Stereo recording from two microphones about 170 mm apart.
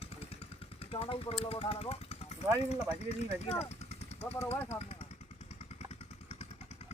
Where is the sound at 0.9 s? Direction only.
35° left (ahead or behind).